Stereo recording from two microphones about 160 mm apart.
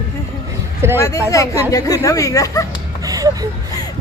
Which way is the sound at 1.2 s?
20° left (ahead or behind).